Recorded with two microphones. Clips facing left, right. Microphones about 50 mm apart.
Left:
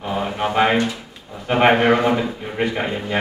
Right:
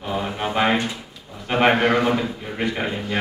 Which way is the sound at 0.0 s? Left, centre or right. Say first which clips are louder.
Left 3 dB; centre.